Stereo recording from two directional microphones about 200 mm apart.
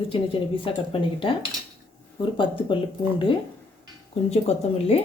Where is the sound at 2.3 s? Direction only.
25° left (ahead or behind).